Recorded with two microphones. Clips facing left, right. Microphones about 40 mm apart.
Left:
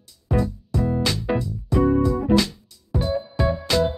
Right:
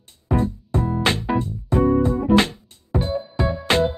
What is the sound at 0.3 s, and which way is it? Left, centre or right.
Music, right.